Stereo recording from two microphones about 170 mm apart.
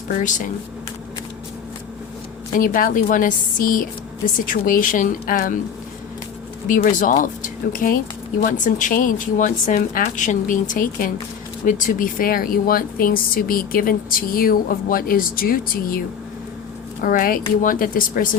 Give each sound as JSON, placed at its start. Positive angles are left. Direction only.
{"t": 0.2, "sound": "speech", "side_deg": 50}
{"t": 2.6, "sound": "speech", "side_deg": 55}
{"t": 6.7, "sound": "a woman's voice", "side_deg": 50}
{"t": 17.0, "sound": "a woman's voice", "side_deg": 55}